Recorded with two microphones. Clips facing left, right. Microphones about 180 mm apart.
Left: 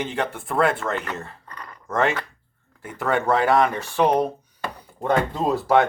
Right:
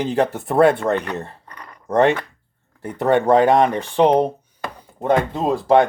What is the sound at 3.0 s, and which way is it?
Speech, 35° right (ahead or behind).